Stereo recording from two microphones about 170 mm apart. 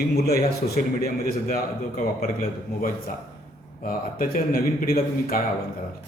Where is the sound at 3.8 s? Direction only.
55° left (ahead or behind).